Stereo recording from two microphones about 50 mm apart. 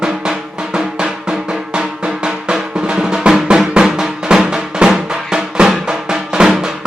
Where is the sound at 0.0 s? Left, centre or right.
Centre.